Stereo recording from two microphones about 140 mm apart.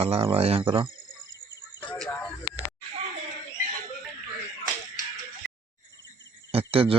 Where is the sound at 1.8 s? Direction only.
5° left (ahead or behind).